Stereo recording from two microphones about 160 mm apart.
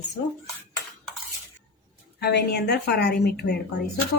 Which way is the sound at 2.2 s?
90° left.